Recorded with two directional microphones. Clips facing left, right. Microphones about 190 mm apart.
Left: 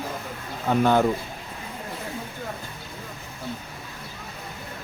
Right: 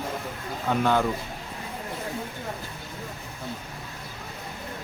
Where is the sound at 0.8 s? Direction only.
40° left (ahead or behind).